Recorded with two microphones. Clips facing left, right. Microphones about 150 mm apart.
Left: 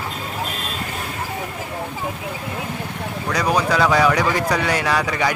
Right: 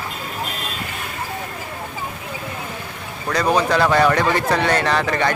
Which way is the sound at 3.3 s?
10° left (ahead or behind).